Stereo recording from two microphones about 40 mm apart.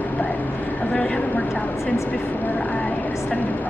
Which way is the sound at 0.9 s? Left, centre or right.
Left.